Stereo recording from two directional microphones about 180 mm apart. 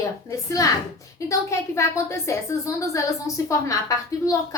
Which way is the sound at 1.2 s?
15° left (ahead or behind).